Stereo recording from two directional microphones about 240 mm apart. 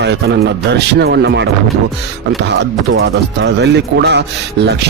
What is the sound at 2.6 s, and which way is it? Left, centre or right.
Speech, right.